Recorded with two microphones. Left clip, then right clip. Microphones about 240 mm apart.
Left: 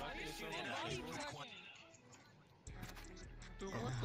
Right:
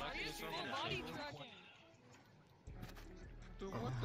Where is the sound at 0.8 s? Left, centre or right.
Centre.